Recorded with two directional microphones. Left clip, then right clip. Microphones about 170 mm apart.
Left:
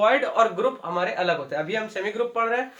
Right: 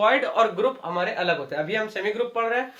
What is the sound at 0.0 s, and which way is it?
A man's voice, 10° right (ahead or behind).